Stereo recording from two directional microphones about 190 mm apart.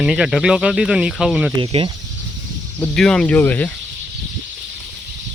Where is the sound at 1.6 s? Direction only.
25° right (ahead or behind).